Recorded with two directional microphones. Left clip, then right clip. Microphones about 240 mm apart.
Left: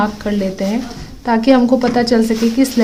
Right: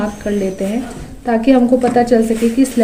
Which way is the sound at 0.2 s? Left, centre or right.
Left.